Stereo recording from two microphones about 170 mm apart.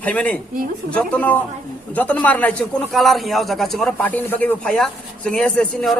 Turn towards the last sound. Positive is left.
turn(degrees=5)  # may be behind; listen again after turning